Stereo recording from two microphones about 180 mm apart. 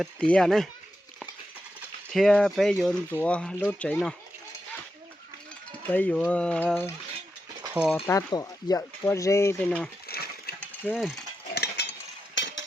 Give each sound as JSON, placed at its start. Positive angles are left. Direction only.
{"t": 0.0, "sound": "speech", "side_deg": 5}
{"t": 2.1, "sound": "speech", "side_deg": 5}
{"t": 5.9, "sound": "speech", "side_deg": 10}
{"t": 7.7, "sound": "speech", "side_deg": -5}
{"t": 8.0, "sound": "speech", "side_deg": 20}
{"t": 10.6, "sound": "mechanisms", "side_deg": 5}
{"t": 11.5, "sound": "a sound", "side_deg": 70}
{"t": 12.3, "sound": "a sound", "side_deg": 90}